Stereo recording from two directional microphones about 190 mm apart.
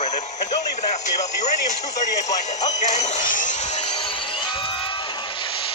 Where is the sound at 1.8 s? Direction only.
20° left (ahead or behind).